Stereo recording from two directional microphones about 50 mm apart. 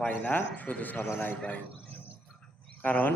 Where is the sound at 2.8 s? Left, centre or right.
Left.